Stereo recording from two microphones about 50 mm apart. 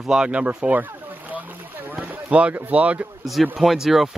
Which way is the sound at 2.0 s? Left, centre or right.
Right.